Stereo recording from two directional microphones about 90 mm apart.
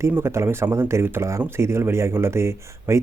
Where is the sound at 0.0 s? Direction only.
30° right (ahead or behind).